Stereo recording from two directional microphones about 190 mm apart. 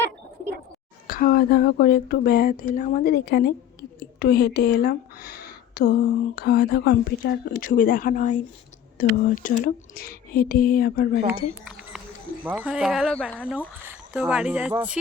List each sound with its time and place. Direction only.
1.0 s a woman's voice: 50° left (ahead or behind)
11.6 s a sound: 5° right (ahead or behind)
12.5 s speech: 5° right (ahead or behind)
13.8 s speech: 10° right (ahead or behind)